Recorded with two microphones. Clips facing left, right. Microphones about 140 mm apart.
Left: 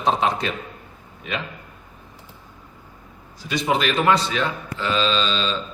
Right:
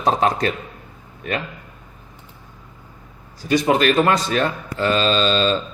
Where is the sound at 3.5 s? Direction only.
50° right (ahead or behind).